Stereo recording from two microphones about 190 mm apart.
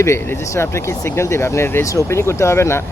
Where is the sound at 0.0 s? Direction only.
15° left (ahead or behind).